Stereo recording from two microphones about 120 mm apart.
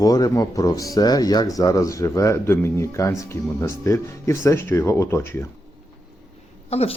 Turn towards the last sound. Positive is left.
turn(degrees=55)  # may be behind; listen again after turning